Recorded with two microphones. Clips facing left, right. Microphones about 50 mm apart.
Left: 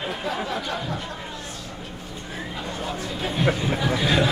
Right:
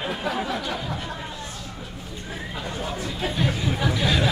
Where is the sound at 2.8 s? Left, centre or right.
Centre.